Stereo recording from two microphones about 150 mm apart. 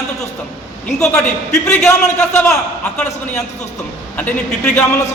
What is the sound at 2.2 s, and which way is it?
Speech, 15° left (ahead or behind).